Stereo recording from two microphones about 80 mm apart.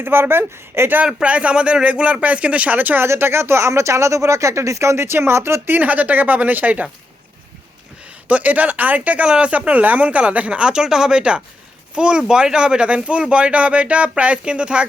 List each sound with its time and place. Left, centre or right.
0.0 s speech: right
1.0 s speech: centre
8.3 s speech: centre